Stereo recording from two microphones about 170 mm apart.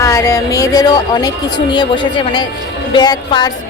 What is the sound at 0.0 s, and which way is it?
Speech, 15° left (ahead or behind).